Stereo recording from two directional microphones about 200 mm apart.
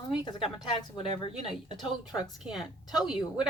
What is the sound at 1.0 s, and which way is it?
Speech, 25° left (ahead or behind).